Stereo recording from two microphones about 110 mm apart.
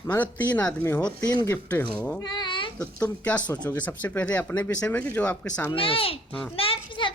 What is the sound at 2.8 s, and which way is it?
Speech, 10° left (ahead or behind).